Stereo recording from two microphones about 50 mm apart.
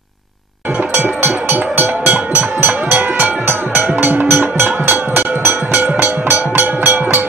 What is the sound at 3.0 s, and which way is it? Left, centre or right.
Music, right.